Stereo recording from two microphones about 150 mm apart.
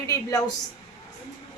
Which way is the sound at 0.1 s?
25° left (ahead or behind).